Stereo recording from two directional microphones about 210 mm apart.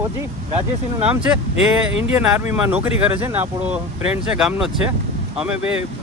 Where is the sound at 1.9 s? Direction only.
25° left (ahead or behind).